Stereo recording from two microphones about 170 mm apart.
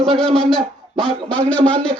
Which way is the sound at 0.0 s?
Centre (ahead or behind).